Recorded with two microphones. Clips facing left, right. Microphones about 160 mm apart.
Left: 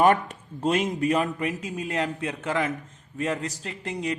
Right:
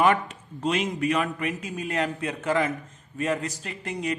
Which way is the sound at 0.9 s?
35° left (ahead or behind).